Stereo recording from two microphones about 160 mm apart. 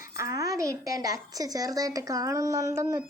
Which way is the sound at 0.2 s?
20° right (ahead or behind).